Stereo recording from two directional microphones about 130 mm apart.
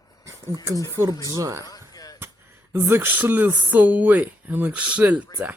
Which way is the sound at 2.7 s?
20° right (ahead or behind).